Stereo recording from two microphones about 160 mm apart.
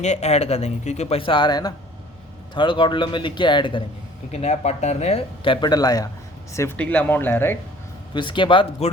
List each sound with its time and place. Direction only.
0.0 s speech: 45° left (ahead or behind)
4.3 s speech: 40° left (ahead or behind); by 7.6 s 15° left (ahead or behind)
8.1 s speech: 30° left (ahead or behind)